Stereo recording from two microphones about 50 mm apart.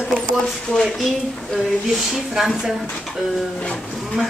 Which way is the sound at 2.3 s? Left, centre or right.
Centre.